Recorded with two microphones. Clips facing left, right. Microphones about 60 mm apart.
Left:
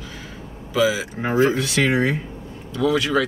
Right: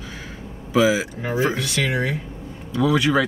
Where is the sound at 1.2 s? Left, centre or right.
Left.